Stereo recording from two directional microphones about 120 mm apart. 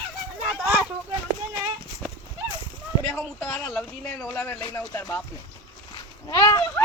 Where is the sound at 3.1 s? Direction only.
5° left (ahead or behind).